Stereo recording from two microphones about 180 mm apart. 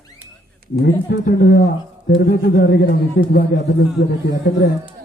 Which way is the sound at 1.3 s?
65° left (ahead or behind).